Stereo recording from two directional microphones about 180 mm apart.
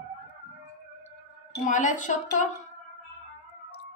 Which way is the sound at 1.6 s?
45° left (ahead or behind).